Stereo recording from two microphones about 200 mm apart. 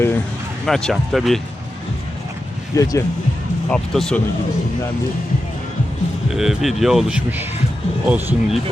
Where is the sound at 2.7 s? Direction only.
15° left (ahead or behind).